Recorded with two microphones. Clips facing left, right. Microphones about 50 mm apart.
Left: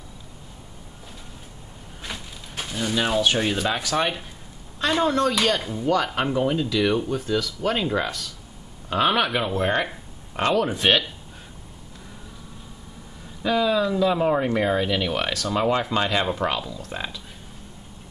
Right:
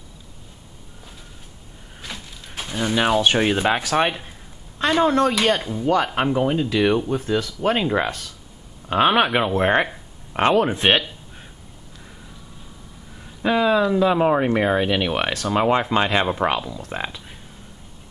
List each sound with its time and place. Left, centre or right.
2.1 s a sound: centre
2.7 s speech: right
5.6 s speech: centre
6.3 s speech: right
13.4 s speech: right